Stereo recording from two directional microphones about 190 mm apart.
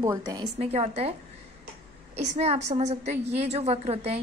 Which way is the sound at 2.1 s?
35° right (ahead or behind).